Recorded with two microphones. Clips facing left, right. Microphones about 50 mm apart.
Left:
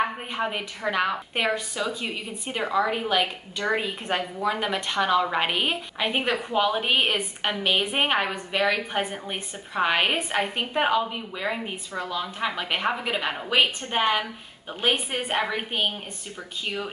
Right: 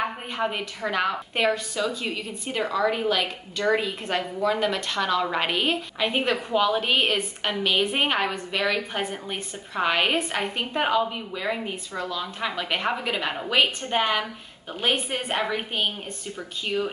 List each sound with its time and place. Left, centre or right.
0.4 s a woman's voice: centre